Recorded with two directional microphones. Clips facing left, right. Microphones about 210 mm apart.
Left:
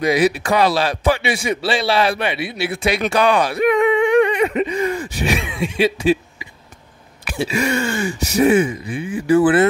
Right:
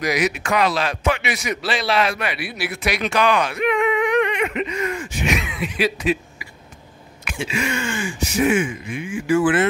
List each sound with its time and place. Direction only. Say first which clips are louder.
0.0 s a man's voice: left 5 dB; 30° left (ahead or behind)
7.2 s speech: left 5 dB; 35° left (ahead or behind)